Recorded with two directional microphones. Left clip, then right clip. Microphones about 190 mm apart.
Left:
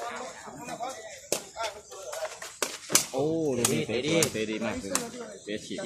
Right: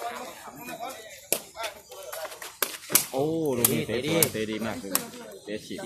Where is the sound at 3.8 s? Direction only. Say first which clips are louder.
Even; 55° right (ahead or behind).